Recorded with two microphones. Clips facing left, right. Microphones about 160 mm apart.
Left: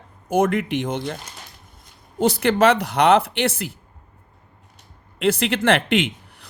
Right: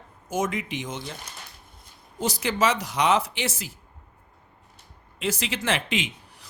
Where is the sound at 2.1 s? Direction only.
60° left (ahead or behind).